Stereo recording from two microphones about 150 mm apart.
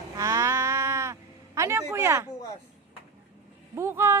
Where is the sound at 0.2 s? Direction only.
20° right (ahead or behind).